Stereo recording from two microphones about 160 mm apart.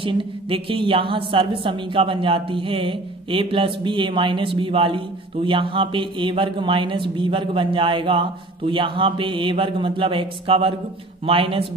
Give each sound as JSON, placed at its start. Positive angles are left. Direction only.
{"t": 0.0, "sound": "a woman's voice", "side_deg": -35}